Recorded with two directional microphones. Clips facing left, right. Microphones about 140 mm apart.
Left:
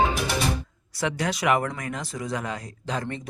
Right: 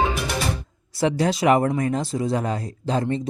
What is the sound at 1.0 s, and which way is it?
Speech, 30° right (ahead or behind).